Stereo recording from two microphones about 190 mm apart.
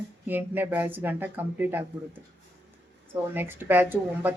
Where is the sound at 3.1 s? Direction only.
10° right (ahead or behind).